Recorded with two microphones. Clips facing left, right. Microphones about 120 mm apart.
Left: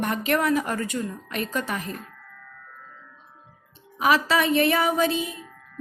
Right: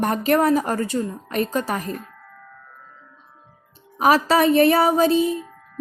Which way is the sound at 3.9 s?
40° right (ahead or behind).